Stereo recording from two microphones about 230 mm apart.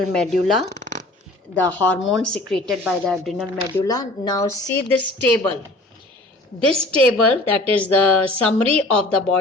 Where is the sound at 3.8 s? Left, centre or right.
Centre.